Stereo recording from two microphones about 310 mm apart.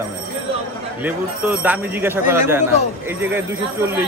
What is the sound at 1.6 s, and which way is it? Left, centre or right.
A man's voice, centre.